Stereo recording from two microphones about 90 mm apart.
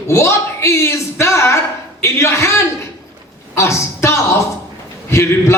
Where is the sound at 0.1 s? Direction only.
30° left (ahead or behind).